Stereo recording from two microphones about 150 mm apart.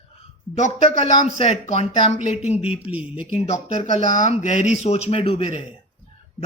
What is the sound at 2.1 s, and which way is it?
Speech, 45° left (ahead or behind).